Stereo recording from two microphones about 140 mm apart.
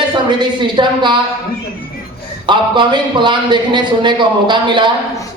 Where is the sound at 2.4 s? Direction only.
35° right (ahead or behind).